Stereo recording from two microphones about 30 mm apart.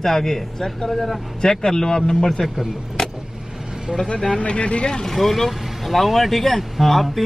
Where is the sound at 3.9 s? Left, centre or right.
Centre.